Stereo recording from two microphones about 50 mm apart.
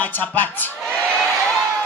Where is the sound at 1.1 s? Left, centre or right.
Centre.